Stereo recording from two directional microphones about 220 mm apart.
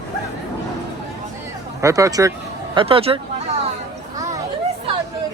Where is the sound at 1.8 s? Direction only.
15° right (ahead or behind).